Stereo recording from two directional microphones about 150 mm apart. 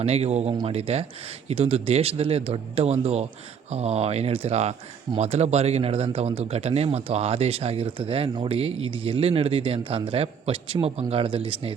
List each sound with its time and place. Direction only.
0.0 s speech: 45° right (ahead or behind)